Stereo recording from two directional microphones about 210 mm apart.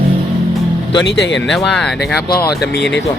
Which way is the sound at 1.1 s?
60° left (ahead or behind).